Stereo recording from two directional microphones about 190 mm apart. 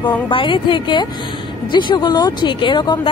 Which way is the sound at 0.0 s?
25° left (ahead or behind).